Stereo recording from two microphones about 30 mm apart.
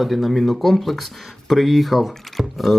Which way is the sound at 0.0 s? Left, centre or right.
Centre.